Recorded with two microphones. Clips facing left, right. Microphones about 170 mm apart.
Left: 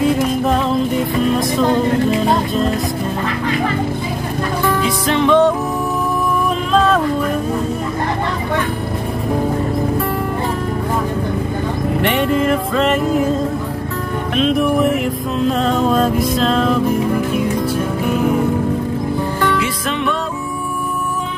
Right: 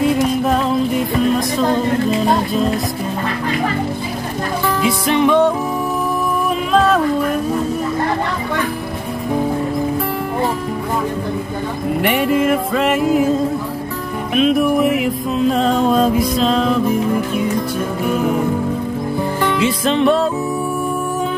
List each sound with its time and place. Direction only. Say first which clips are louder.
1.6 s music: left 3 dB; centre (ahead or behind)
4.8 s music: right 3 dB; 10° right (ahead or behind)
6.7 s music: even; 5° right (ahead or behind)
12.0 s music: right 1 dB; 5° right (ahead or behind)
14.3 s music: right 1 dB; 5° right (ahead or behind)
19.4 s music: right 4 dB; 25° right (ahead or behind)